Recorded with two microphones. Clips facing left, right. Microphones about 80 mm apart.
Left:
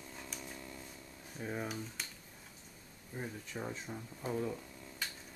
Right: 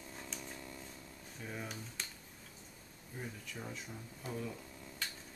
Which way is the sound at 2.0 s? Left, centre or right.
Centre.